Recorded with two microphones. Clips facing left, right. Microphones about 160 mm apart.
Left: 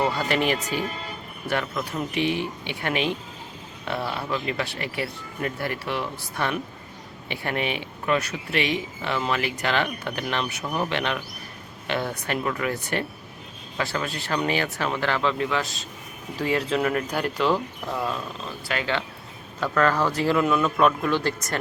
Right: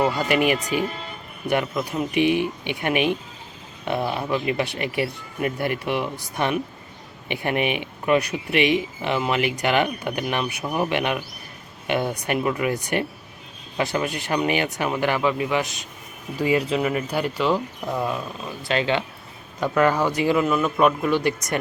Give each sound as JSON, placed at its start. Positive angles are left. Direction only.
{"t": 0.0, "sound": "speech", "side_deg": -10}
{"t": 17.8, "sound": "speech", "side_deg": -15}